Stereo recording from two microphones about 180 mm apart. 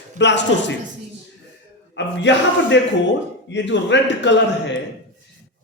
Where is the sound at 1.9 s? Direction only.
80° left.